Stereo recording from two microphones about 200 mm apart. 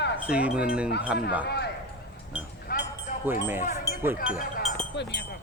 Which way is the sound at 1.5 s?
55° left (ahead or behind).